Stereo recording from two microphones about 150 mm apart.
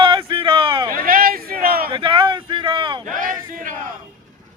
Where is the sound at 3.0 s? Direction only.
65° right (ahead or behind).